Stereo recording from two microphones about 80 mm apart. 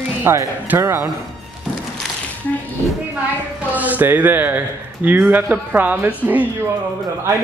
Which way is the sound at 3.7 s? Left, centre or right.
Centre.